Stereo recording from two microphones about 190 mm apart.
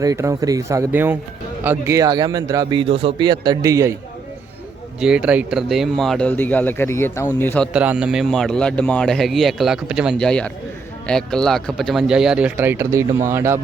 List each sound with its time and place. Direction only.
0.0 s speech: 15° right (ahead or behind)
4.9 s speech: 5° right (ahead or behind)
7.7 s a man's voice: 5° right (ahead or behind)